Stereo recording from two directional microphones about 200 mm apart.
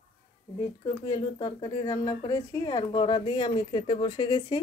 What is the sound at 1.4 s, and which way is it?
Speech, 20° left (ahead or behind).